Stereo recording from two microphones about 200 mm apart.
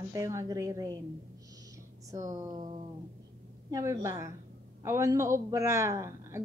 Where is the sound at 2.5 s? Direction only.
25° right (ahead or behind).